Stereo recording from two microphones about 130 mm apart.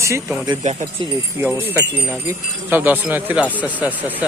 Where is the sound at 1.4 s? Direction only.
15° right (ahead or behind).